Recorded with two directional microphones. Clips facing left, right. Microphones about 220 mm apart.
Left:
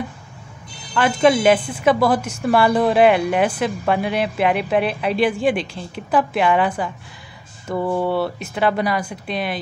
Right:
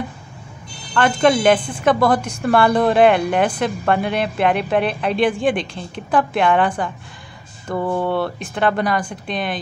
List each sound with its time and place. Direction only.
0.9 s a woman's voice: 5° left (ahead or behind)